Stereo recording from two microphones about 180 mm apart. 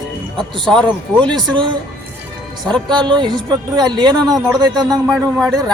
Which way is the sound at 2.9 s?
25° right (ahead or behind).